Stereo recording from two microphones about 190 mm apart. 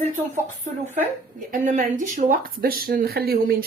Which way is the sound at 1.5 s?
45° right (ahead or behind).